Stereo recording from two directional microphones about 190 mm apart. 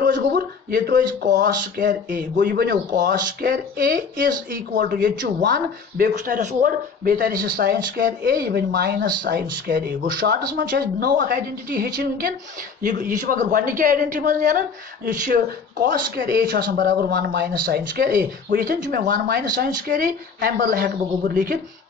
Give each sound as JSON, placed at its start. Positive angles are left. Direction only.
{"t": 0.0, "sound": "speech", "side_deg": -50}